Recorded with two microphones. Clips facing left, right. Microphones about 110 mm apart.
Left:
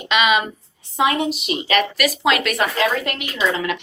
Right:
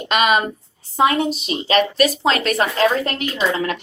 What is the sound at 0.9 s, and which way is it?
A woman's voice, 30° right (ahead or behind).